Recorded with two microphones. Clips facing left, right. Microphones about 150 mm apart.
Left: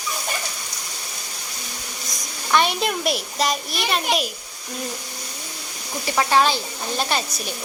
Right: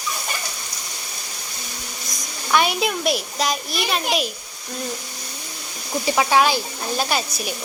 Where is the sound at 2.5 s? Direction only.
5° right (ahead or behind).